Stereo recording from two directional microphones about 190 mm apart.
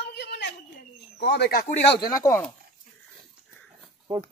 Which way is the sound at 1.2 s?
60° left (ahead or behind).